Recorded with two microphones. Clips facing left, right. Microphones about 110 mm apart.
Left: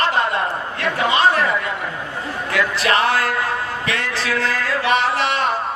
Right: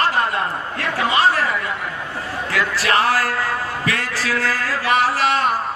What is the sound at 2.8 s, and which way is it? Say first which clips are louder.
Speech: right 1 dB; 20° left (ahead or behind).